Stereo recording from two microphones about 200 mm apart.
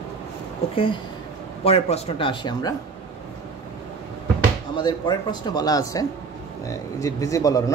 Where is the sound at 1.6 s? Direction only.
30° left (ahead or behind).